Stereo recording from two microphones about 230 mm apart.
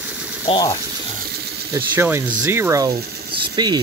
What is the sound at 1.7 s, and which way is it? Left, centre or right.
Speech, centre.